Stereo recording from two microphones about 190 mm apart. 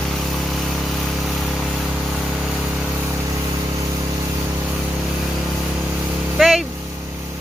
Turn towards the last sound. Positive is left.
turn(degrees=0)  # may be behind; listen again after turning